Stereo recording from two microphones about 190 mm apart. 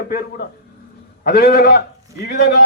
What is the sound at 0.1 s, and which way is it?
A man's voice, 55° left (ahead or behind).